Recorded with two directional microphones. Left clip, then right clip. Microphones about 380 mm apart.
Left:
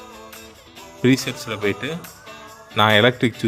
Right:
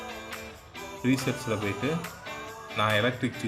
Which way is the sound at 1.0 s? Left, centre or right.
Left.